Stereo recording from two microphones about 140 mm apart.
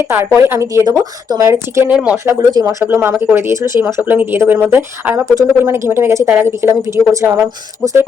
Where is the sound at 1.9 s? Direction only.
10° right (ahead or behind).